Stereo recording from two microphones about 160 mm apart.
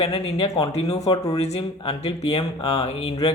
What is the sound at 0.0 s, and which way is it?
Speech, 40° left (ahead or behind).